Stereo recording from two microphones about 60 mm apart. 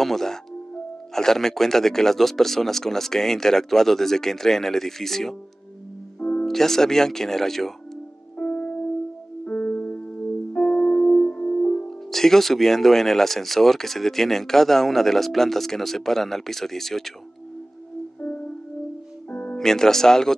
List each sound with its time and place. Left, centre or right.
0.0 s speech: centre
6.1 s music: centre
6.4 s speech: centre
8.4 s music: centre
9.4 s music: left
10.7 s music: centre
11.9 s speech: centre
18.2 s music: left
19.6 s speech: centre